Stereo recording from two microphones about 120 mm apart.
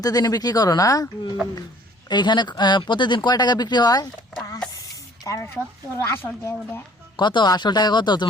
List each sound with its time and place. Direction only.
0.0 s a woman's voice: 30° left (ahead or behind)
7.2 s speech: 40° left (ahead or behind)